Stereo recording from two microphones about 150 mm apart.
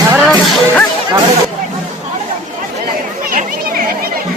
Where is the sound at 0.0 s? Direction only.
15° right (ahead or behind).